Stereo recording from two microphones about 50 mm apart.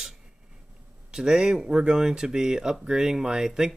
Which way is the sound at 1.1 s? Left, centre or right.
Centre.